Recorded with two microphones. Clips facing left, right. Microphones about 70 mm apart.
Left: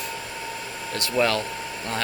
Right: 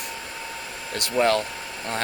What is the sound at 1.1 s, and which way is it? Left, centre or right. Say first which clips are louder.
Speech: right 2 dB; right.